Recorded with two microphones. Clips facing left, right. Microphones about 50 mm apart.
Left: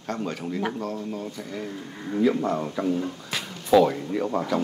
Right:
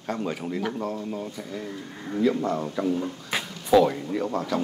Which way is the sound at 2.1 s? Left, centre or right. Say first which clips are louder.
Left 1 dB; centre.